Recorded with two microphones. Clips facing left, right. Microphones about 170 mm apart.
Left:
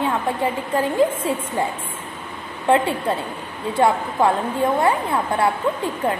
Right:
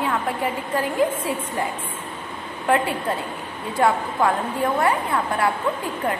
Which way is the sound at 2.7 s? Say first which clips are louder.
Left 3 dB; 25° left (ahead or behind).